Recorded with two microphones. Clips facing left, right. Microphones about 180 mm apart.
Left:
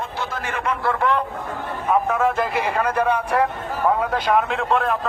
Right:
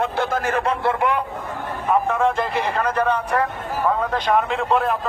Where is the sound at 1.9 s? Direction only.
5° left (ahead or behind).